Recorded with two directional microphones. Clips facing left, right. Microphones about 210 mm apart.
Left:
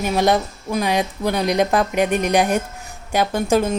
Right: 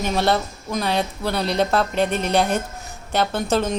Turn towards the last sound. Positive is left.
turn(degrees=10)  # may be behind; listen again after turning